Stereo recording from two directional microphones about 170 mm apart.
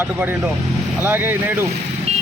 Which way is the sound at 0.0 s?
10° right (ahead or behind).